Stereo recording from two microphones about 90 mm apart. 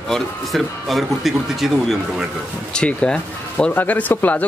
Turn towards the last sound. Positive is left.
turn(degrees=20)  # may be behind; listen again after turning